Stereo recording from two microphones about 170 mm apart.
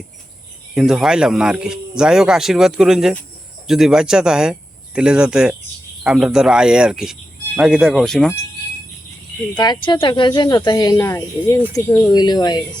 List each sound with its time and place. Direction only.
0.7 s speech: centre (ahead or behind)
9.6 s speech: 25° left (ahead or behind)